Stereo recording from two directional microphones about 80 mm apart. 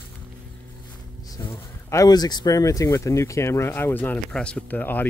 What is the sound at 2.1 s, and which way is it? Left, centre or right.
Speech, left.